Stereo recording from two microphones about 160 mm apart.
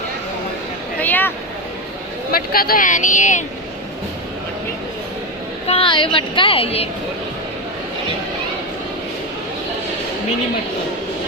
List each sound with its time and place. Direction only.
1.0 s speech: 10° left (ahead or behind)
2.3 s speech: 70° left (ahead or behind); by 3.4 s 50° left (ahead or behind)
5.6 s a woman's voice: 35° left (ahead or behind)